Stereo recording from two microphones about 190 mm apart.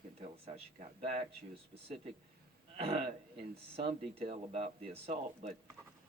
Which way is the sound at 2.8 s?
35° right (ahead or behind).